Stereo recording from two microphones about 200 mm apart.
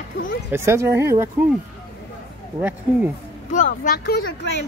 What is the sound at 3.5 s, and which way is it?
Speech, 40° left (ahead or behind).